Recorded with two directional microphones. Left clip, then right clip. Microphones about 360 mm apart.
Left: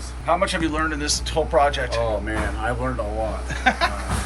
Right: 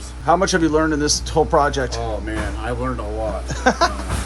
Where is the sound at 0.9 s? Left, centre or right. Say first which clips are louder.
Right 5 dB; centre.